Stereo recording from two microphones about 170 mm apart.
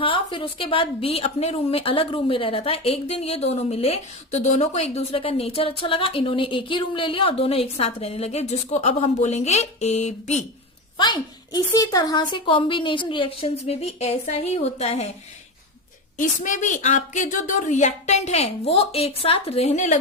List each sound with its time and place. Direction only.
0.0 s a woman's voice: 30° left (ahead or behind)
10.9 s a woman's voice: 25° left (ahead or behind)
16.1 s a woman's voice: 50° left (ahead or behind)